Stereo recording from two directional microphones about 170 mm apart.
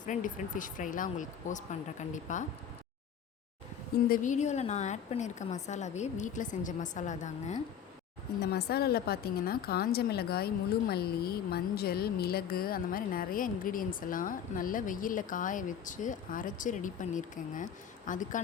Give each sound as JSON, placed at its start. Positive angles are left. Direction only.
{"t": 0.0, "sound": "a woman's voice", "side_deg": 50}
{"t": 4.1, "sound": "a woman's voice", "side_deg": 50}
{"t": 8.4, "sound": "a woman's voice", "side_deg": 70}